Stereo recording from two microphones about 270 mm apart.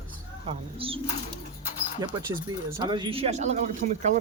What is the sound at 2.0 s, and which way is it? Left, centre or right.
Speech, centre.